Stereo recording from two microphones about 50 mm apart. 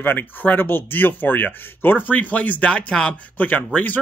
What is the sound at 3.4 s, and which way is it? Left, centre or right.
Speech, left.